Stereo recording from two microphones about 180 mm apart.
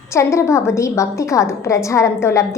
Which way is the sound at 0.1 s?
15° left (ahead or behind).